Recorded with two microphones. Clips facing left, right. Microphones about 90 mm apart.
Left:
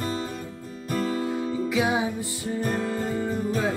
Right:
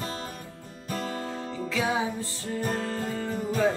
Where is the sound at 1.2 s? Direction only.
10° left (ahead or behind).